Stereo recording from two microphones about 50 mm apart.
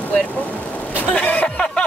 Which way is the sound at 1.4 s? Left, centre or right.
Centre.